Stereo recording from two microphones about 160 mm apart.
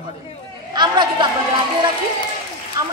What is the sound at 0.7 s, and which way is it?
Chatter, 25° right (ahead or behind).